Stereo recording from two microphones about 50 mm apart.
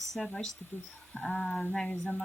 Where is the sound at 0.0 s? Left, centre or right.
Centre.